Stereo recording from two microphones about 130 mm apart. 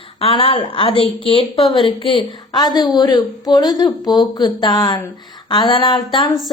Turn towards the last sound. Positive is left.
turn(degrees=40)  # may be behind; listen again after turning